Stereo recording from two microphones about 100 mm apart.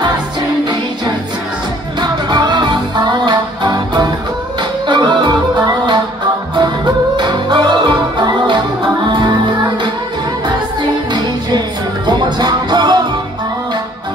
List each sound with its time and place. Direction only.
2.0 s music: 45° right (ahead or behind)
6.5 s music: 50° right (ahead or behind)
12.1 s music: 45° right (ahead or behind)